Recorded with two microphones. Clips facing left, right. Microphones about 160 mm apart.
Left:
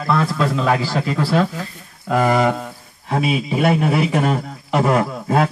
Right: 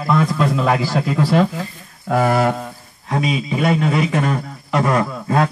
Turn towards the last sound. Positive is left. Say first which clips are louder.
# left 1 dB
turn(degrees=5)  # may be behind; listen again after turning